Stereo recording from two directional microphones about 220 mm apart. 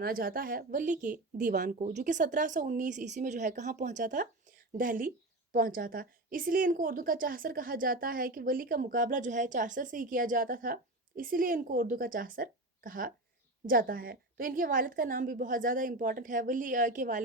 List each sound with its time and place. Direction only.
0.0 s a woman's voice: 40° right (ahead or behind)